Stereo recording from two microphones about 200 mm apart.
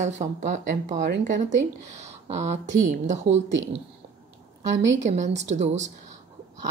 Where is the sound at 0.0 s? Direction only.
35° right (ahead or behind).